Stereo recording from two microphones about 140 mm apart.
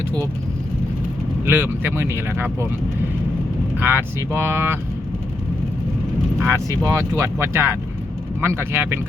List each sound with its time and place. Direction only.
1.5 s speech: 15° right (ahead or behind)
3.8 s speech: 15° right (ahead or behind)
6.4 s speech: 20° right (ahead or behind)